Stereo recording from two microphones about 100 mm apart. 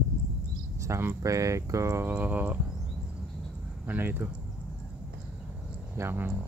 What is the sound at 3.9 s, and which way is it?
Speech, 20° right (ahead or behind).